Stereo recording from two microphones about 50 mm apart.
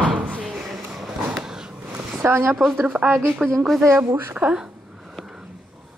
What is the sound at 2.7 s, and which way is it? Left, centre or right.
Speech, right.